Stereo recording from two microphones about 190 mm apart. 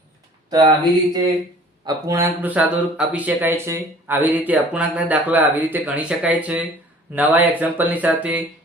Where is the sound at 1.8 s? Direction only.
15° right (ahead or behind).